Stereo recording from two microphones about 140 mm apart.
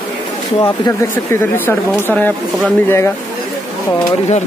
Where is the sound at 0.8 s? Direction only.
20° left (ahead or behind).